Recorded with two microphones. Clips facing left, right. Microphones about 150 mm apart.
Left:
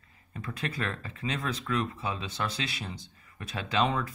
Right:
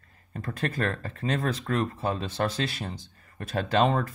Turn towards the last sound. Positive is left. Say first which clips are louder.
# right 5 dB
turn(degrees=-50)  # may be behind; listen again after turning